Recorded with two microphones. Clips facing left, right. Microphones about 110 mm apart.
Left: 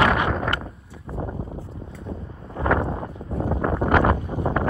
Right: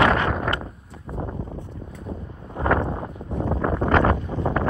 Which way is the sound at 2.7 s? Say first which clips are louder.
Even; centre (ahead or behind).